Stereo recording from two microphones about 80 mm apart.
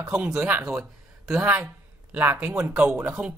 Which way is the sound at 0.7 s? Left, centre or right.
Centre.